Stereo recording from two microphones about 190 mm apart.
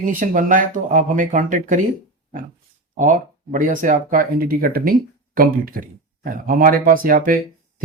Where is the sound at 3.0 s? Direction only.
45° right (ahead or behind).